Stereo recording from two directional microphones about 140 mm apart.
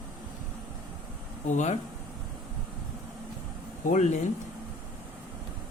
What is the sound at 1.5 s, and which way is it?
Speech, 55° left (ahead or behind).